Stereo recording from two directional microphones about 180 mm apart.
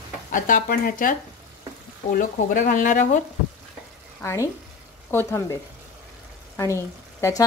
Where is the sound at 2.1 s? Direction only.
45° left (ahead or behind).